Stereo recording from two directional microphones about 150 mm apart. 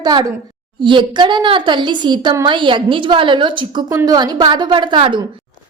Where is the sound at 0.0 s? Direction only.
30° right (ahead or behind).